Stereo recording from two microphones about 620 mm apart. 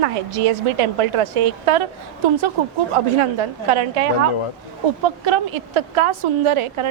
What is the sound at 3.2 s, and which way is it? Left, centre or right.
A woman's voice, right.